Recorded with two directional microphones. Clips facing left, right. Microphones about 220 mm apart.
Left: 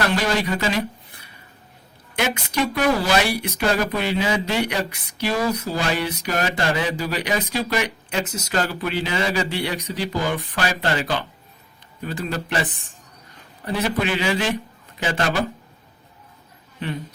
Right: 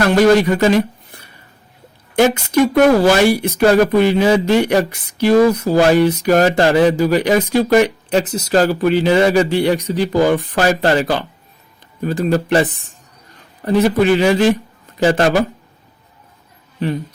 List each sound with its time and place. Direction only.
0.1 s speech: 50° right (ahead or behind)
2.1 s speech: 45° right (ahead or behind)
8.2 s speech: 30° right (ahead or behind)
13.7 s a man's voice: 45° right (ahead or behind)